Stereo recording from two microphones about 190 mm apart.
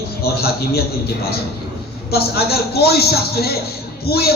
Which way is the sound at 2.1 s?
55° left (ahead or behind).